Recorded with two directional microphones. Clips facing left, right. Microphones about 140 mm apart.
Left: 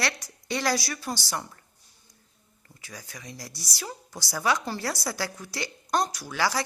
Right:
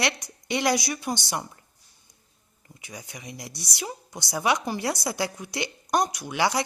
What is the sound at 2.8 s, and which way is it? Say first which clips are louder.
Speech: right 2 dB; 20° right (ahead or behind).